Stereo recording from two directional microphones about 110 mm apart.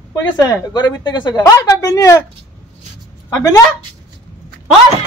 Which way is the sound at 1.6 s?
30° left (ahead or behind).